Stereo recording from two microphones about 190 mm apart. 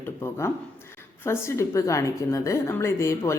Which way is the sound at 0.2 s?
15° left (ahead or behind).